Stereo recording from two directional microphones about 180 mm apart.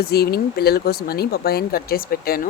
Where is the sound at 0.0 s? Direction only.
60° left (ahead or behind).